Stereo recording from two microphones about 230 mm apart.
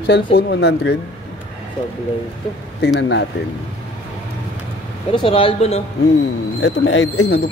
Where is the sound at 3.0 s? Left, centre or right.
Left.